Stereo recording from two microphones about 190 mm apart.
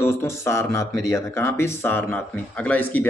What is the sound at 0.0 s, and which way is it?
A man's voice, 15° left (ahead or behind).